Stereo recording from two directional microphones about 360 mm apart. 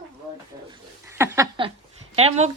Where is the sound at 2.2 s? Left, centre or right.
Centre.